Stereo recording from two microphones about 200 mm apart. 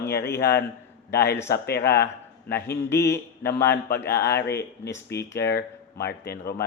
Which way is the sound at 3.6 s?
55° left (ahead or behind).